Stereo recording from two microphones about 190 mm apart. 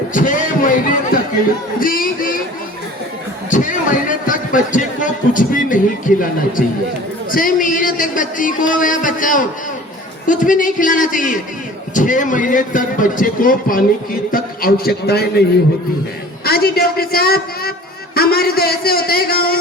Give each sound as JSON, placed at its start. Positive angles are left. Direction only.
{"t": 0.1, "sound": "a man's voice", "side_deg": 45}
{"t": 3.5, "sound": "a man's voice", "side_deg": 45}
{"t": 7.3, "sound": "a man's voice", "side_deg": 45}